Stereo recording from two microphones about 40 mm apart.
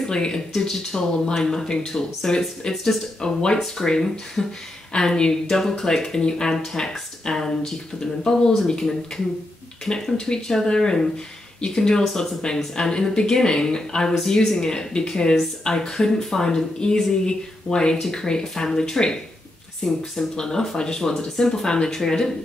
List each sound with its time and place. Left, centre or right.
0.0 s speech: centre
3.3 s speech: centre
9.8 s speech: centre
12.0 s speech: centre